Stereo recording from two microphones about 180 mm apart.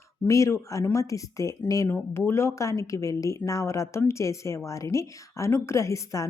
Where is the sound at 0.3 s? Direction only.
15° left (ahead or behind).